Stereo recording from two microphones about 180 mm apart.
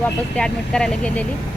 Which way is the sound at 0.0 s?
5° left (ahead or behind).